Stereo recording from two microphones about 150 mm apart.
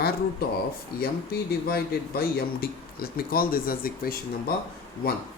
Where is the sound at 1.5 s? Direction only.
90° left.